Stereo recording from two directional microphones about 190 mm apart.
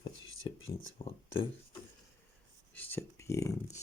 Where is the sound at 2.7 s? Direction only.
10° left (ahead or behind).